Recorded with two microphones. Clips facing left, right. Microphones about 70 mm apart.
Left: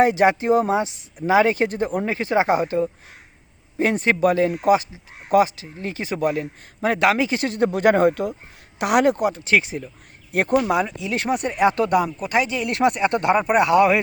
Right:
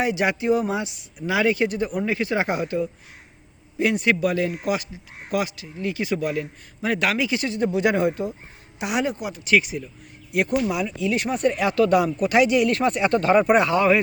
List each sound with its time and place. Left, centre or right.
0.0 s a man's voice: left
11.9 s speech: centre
13.7 s speech: centre